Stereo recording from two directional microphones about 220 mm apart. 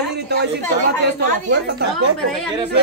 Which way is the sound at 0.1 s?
50° right (ahead or behind).